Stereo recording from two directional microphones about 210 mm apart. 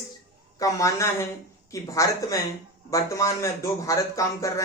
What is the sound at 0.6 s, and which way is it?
Speech, 15° left (ahead or behind).